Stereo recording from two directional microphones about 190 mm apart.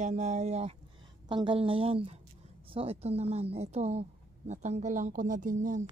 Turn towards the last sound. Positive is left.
turn(degrees=-40)  # may be behind; listen again after turning